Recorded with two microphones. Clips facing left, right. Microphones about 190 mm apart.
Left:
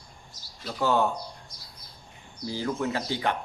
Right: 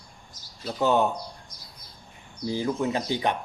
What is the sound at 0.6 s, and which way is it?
Speech, 20° right (ahead or behind).